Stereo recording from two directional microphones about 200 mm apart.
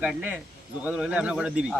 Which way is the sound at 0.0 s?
5° right (ahead or behind).